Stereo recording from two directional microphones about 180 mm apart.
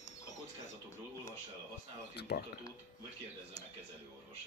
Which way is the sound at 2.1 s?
65° left (ahead or behind).